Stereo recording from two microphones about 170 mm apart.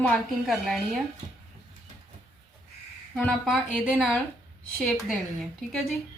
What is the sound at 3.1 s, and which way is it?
A woman's voice, centre (ahead or behind).